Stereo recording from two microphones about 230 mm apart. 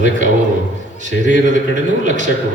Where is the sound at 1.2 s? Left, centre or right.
Right.